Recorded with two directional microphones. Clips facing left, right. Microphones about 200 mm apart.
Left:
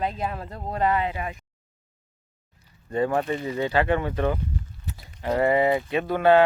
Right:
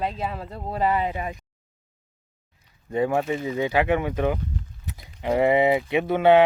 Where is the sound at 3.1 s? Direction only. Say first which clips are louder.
Right 1 dB; 5° right (ahead or behind).